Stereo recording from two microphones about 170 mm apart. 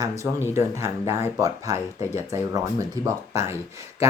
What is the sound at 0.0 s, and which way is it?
Speech, 20° right (ahead or behind).